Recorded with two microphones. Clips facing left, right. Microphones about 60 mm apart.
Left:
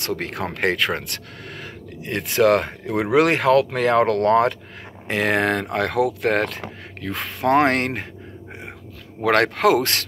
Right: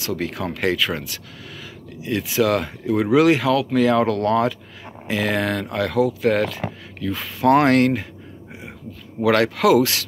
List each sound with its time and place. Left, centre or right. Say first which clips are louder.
0.0 s speech: right 1 dB; left
7.4 s speech: right 3 dB; left
9.2 s speech: even; left